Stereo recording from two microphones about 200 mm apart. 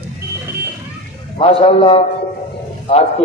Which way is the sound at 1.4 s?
30° left (ahead or behind).